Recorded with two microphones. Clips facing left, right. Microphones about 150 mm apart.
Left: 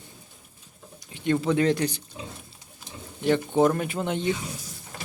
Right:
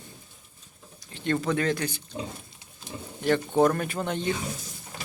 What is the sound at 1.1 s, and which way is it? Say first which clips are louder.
Speech: left 3 dB; 15° left (ahead or behind).